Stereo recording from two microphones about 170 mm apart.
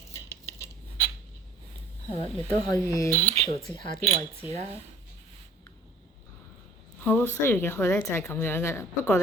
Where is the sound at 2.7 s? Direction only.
20° left (ahead or behind).